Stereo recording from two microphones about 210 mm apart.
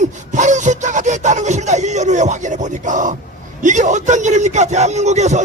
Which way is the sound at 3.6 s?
35° right (ahead or behind).